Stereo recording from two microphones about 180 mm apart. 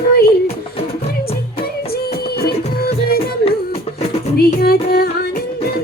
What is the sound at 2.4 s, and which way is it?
Music, 60° left (ahead or behind).